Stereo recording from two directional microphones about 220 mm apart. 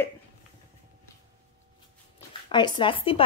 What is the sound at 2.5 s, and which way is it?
Speech, 20° left (ahead or behind).